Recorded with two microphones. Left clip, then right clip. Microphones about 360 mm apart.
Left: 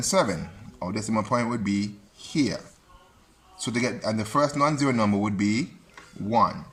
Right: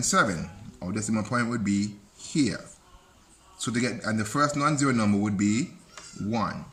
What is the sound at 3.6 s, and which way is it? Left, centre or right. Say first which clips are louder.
Speech: left 2 dB; centre.